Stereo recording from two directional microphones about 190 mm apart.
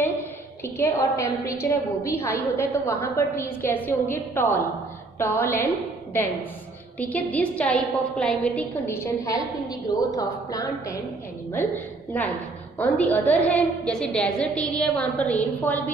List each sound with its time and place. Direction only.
0.7 s a woman's voice: 15° left (ahead or behind)
7.0 s a woman's voice: 10° left (ahead or behind)